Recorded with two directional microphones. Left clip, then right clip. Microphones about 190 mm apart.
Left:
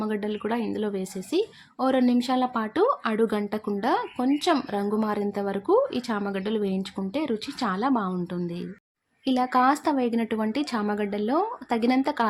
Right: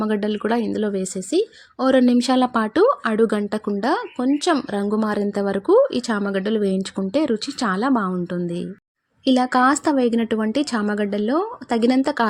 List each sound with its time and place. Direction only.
0.0 s speech: 30° right (ahead or behind)